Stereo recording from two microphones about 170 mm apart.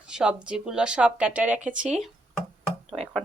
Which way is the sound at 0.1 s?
5° right (ahead or behind).